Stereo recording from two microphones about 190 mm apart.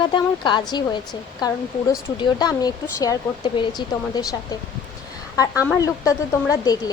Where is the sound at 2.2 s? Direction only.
20° left (ahead or behind).